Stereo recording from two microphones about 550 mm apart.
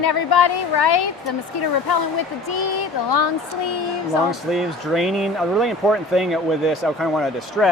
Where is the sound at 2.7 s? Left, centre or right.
Left.